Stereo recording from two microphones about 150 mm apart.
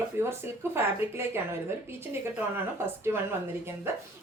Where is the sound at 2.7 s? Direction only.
15° right (ahead or behind).